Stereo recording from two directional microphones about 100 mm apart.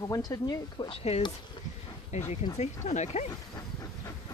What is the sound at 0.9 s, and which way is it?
Speech, 90° left.